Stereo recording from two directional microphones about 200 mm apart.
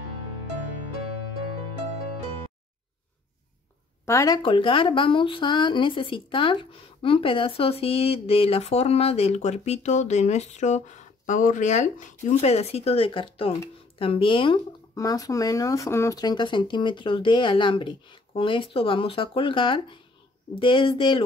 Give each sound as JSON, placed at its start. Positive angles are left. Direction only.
{"t": 4.0, "sound": "speech", "side_deg": 15}